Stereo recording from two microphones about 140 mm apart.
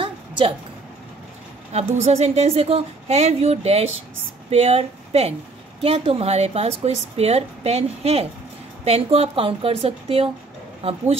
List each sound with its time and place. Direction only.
1.7 s a woman's voice: 50° right (ahead or behind)